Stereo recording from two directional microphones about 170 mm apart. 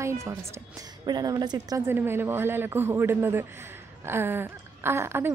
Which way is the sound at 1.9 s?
15° right (ahead or behind).